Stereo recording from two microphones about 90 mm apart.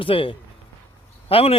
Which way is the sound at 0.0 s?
80° left.